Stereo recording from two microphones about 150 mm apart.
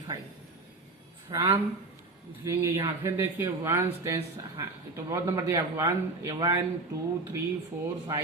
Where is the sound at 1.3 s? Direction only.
25° right (ahead or behind).